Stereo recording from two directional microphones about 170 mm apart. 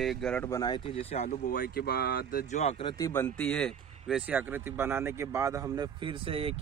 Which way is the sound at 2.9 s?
15° left (ahead or behind).